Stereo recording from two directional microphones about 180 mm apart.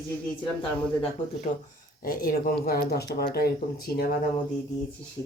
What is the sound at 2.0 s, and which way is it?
Speech, 50° left (ahead or behind).